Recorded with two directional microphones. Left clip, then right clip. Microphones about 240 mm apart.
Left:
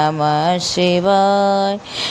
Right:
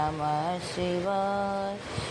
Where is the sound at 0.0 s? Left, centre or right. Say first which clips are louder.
Left 13 dB; left.